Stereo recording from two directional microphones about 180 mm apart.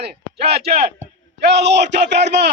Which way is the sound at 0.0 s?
65° right (ahead or behind).